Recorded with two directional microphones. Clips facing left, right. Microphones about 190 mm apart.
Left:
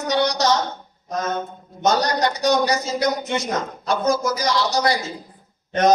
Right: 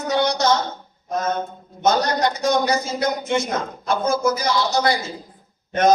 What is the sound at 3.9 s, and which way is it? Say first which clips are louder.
Speech: right 1 dB; 35° left (ahead or behind).